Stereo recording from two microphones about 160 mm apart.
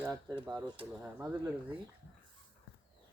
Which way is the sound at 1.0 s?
20° right (ahead or behind).